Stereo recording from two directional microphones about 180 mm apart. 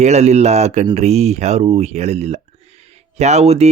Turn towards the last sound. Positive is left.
turn(degrees=-35)  # may be behind; listen again after turning